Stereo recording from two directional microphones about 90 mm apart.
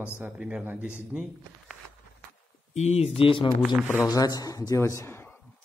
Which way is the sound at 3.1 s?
80° left.